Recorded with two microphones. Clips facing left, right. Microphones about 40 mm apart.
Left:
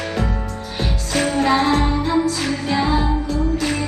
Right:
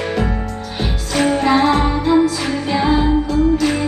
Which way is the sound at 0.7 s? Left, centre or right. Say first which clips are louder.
Right 2 dB; centre.